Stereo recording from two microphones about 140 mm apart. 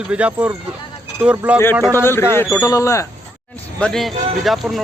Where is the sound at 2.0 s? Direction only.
15° left (ahead or behind).